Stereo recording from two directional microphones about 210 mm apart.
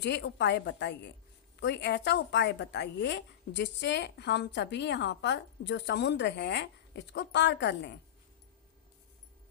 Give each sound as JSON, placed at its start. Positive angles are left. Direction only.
{"t": 0.0, "sound": "a woman's voice", "side_deg": 55}